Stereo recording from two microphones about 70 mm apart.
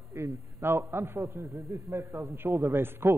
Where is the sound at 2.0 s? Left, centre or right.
Right.